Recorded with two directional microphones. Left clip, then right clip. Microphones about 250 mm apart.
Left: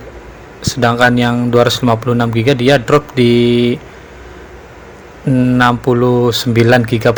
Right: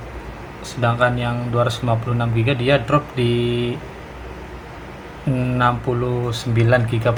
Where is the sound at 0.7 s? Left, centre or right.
Left.